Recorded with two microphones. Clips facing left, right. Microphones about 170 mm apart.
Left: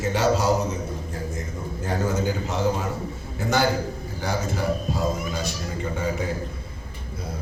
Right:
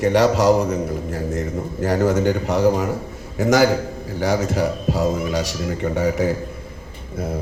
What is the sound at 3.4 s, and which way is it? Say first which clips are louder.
A man's voice: right 7 dB; 90° right.